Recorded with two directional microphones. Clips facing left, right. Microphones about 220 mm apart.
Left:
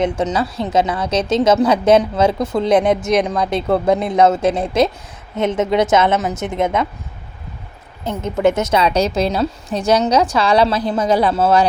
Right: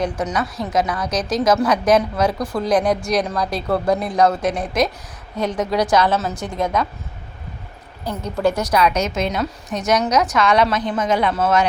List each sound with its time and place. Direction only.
0.0 s a woman's voice: 25° left (ahead or behind)
8.0 s a woman's voice: 20° left (ahead or behind)